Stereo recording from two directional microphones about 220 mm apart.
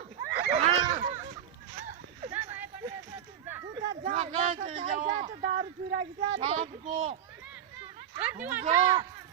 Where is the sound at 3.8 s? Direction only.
35° right (ahead or behind).